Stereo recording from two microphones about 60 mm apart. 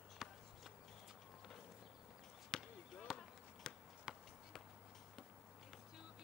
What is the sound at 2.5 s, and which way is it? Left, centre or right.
Basketball bounce, centre.